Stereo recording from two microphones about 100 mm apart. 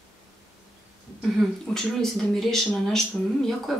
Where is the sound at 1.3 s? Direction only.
5° left (ahead or behind).